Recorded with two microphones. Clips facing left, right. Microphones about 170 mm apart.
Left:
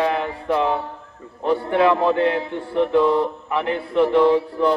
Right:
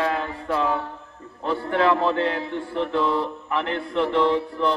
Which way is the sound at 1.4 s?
15° left (ahead or behind).